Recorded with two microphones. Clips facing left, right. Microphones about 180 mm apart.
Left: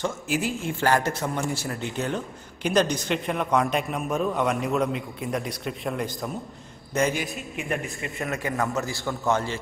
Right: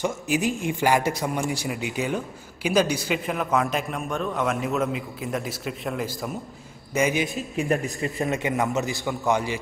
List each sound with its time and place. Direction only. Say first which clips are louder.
0.0 s a man's voice: right 3 dB; 15° right (ahead or behind)
7.5 s speech: right 6 dB; 40° right (ahead or behind)
8.3 s a man's voice: right 1 dB; 20° right (ahead or behind)